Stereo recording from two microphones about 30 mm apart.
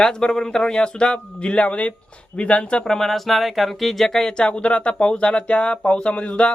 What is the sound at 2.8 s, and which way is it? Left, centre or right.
Speech, centre.